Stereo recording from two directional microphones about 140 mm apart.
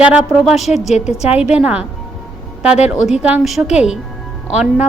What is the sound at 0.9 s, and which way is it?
Speech, 50° left (ahead or behind).